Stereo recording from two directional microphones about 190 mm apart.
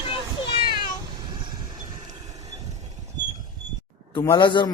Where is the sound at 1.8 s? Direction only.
20° right (ahead or behind).